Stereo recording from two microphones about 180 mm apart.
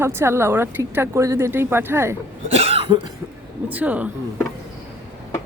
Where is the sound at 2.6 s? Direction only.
30° right (ahead or behind).